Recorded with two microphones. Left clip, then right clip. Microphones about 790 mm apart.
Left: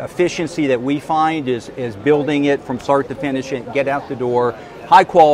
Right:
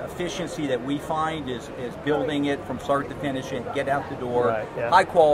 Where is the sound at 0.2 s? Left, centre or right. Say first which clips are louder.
Left 13 dB; left.